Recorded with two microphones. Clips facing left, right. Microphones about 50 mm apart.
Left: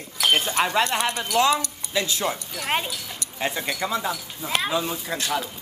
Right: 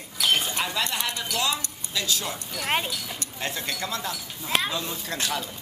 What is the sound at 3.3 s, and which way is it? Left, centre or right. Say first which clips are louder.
Speech: left 5 dB; centre.